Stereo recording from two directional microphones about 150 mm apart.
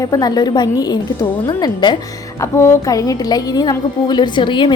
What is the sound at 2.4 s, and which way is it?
A woman's voice, 15° left (ahead or behind).